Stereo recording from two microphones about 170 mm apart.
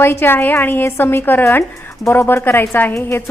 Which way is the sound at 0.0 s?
15° left (ahead or behind).